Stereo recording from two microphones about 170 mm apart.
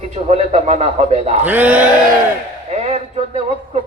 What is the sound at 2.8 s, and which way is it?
Speech, 35° right (ahead or behind).